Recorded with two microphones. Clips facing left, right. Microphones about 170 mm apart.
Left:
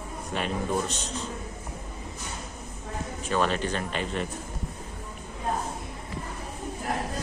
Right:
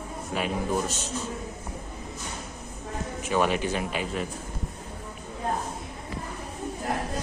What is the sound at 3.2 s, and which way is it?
Speech, 10° right (ahead or behind).